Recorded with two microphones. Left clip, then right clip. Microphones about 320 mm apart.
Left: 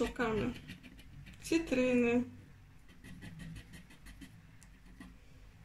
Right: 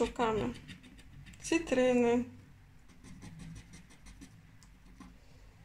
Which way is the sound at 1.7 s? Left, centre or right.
Centre.